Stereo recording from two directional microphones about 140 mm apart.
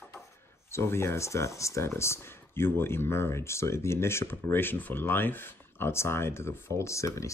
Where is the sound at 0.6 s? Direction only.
20° left (ahead or behind).